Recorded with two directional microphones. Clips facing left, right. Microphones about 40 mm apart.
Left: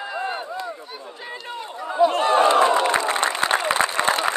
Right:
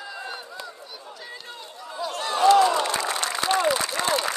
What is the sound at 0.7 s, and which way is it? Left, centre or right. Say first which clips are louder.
Run: left 6 dB; left.